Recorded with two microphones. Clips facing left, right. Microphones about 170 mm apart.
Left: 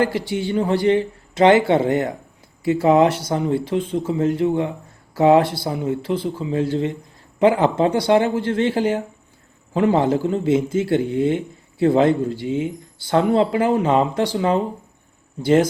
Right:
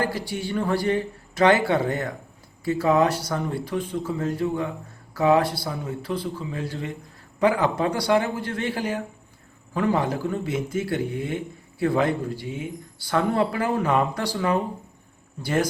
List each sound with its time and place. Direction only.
0.3 s speech: 20° left (ahead or behind)